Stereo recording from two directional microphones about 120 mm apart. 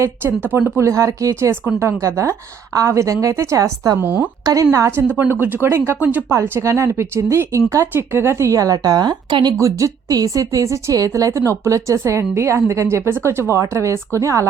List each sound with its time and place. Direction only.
0.0 s speech: 20° right (ahead or behind)
4.0 s speech: 15° right (ahead or behind)
4.4 s speech: 30° right (ahead or behind)